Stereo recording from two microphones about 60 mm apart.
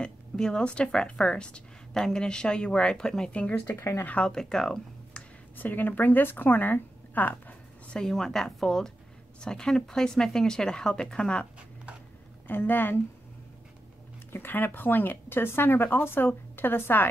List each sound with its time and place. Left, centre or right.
0.0 s speech: centre
3.3 s speech: left
3.7 s speech: left
4.0 s speech: left
4.3 s speech: centre
5.6 s speech: left
8.0 s a woman's voice: centre
12.4 s speech: left
14.3 s speech: left